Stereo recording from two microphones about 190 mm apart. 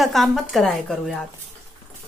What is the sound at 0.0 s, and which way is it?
Speech, centre (ahead or behind).